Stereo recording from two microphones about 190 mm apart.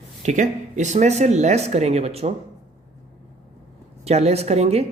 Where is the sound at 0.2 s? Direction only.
40° right (ahead or behind).